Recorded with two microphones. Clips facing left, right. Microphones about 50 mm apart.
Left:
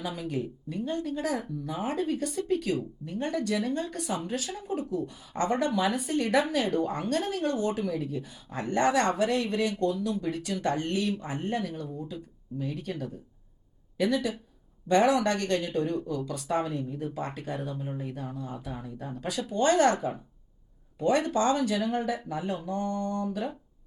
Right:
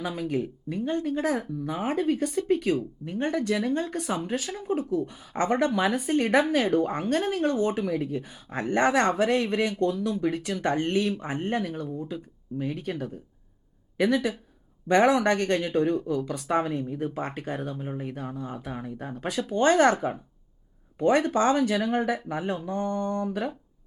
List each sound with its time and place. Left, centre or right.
0.0 s speech: right